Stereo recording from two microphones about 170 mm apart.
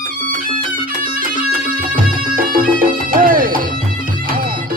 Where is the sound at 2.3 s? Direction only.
55° right (ahead or behind).